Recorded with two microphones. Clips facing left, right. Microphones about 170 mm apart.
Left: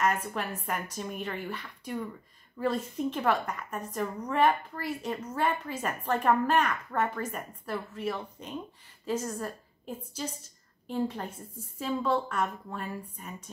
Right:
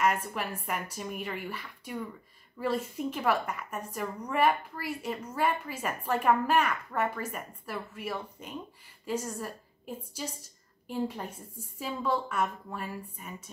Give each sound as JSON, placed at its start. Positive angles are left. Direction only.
{"t": 0.3, "sound": "a woman's voice", "side_deg": -10}